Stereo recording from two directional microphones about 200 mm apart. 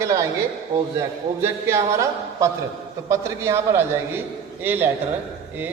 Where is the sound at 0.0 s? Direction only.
15° right (ahead or behind).